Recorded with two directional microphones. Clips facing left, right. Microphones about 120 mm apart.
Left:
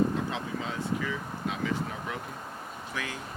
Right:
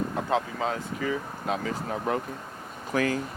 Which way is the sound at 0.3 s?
50° right (ahead or behind).